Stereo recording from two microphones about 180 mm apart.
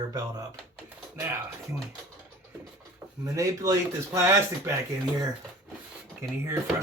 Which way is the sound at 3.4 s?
20° right (ahead or behind).